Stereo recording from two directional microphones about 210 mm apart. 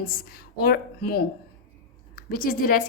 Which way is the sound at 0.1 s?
45° left (ahead or behind).